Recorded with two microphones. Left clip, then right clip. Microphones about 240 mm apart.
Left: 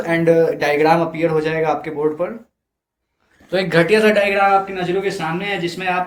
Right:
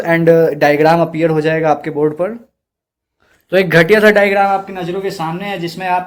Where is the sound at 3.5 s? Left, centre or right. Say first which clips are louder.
Right 5 dB; right.